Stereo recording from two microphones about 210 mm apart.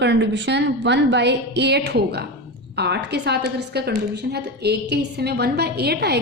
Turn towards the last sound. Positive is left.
turn(degrees=-50)  # may be behind; listen again after turning